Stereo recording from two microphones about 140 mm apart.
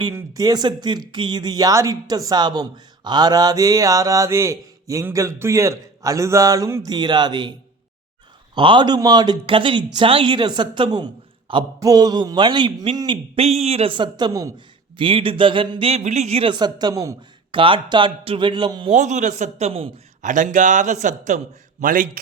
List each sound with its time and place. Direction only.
0.1 s speech: 25° right (ahead or behind)
8.5 s speech: 35° right (ahead or behind)
13.3 s a man's voice: 45° right (ahead or behind); by 14.5 s 25° right (ahead or behind)
14.9 s speech: 40° right (ahead or behind)
16.5 s speech: 30° right (ahead or behind)
17.5 s speech: 35° right (ahead or behind)
18.9 s a man's voice: 55° right (ahead or behind)
20.2 s a man's voice: 65° right (ahead or behind)